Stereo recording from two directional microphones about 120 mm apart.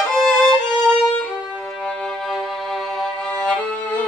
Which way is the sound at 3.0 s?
10° left (ahead or behind).